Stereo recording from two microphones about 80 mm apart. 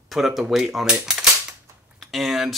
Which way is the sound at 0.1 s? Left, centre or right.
Centre.